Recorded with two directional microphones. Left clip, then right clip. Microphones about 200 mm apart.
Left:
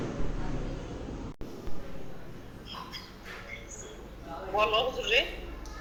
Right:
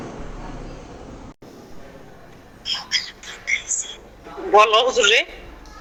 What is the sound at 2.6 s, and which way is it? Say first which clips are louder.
Bird: right 19 dB; 50° right (ahead or behind).